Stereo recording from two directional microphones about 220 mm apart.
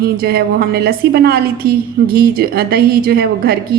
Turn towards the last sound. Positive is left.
turn(degrees=-45)  # may be behind; listen again after turning